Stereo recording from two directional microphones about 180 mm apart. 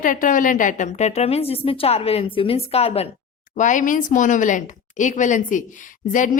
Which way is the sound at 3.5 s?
45° left (ahead or behind).